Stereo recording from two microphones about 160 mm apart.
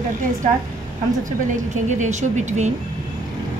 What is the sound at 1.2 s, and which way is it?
A woman's voice, 50° right (ahead or behind).